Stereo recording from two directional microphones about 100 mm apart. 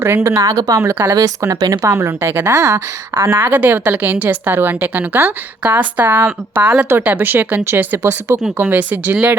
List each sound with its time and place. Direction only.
0.0 s speech: 25° right (ahead or behind); by 1.9 s 40° right (ahead or behind)
1.9 s a woman's voice: 25° right (ahead or behind)